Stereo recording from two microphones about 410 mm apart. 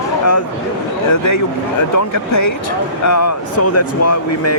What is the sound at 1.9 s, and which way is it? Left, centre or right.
Speech, left.